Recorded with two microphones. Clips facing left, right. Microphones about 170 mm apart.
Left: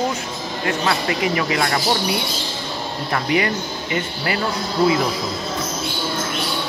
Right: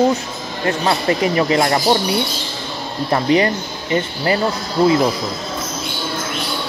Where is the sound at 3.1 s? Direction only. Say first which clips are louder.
Right 5 dB; 30° right (ahead or behind).